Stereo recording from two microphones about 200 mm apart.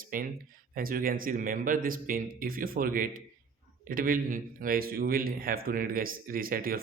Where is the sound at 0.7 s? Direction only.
45° right (ahead or behind).